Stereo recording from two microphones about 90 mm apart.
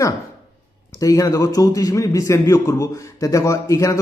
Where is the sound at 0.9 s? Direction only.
40° left (ahead or behind).